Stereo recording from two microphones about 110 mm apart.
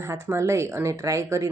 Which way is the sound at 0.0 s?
25° right (ahead or behind).